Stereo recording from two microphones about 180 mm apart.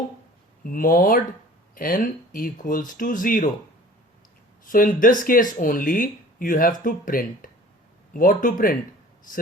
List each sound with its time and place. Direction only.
0.6 s speech: 50° left (ahead or behind)
4.6 s speech: 50° left (ahead or behind)